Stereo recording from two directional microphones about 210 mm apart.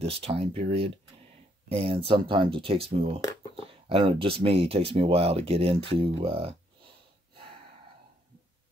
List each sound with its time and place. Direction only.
0.0 s speech: 25° right (ahead or behind)